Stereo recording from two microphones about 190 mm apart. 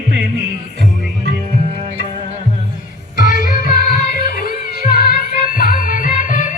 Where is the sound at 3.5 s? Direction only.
50° left (ahead or behind).